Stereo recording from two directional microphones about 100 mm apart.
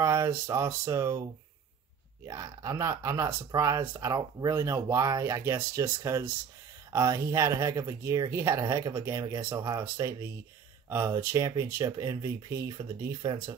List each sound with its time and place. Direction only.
0.0 s speech: 25° right (ahead or behind)
9.5 s speech: 45° right (ahead or behind)
9.8 s speech: 30° right (ahead or behind)